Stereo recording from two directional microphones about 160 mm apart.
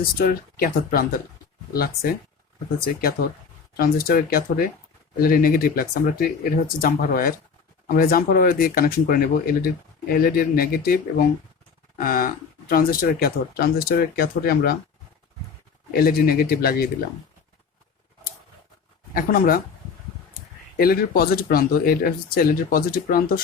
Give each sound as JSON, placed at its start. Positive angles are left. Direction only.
{"t": 0.2, "sound": "speech", "side_deg": 65}
{"t": 3.8, "sound": "speech", "side_deg": 65}
{"t": 15.9, "sound": "speech", "side_deg": 70}
{"t": 19.1, "sound": "speech", "side_deg": 65}
{"t": 20.7, "sound": "speech", "side_deg": 70}